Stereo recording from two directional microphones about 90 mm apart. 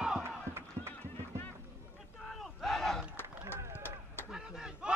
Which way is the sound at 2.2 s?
Centre (ahead or behind).